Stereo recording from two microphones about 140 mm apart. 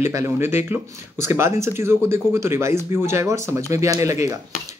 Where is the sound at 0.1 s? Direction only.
20° right (ahead or behind).